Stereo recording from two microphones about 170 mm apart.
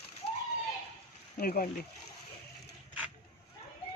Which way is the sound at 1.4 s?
60° left (ahead or behind).